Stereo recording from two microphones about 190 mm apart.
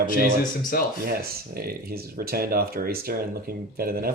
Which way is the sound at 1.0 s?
55° right (ahead or behind).